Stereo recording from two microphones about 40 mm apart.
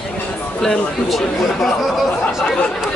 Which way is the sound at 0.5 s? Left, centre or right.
Left.